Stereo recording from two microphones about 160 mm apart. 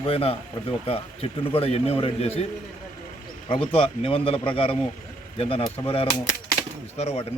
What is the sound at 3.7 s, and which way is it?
Speech, 35° left (ahead or behind).